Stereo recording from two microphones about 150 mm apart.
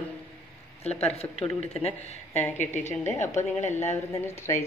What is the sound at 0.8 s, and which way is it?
Speech, 45° left (ahead or behind).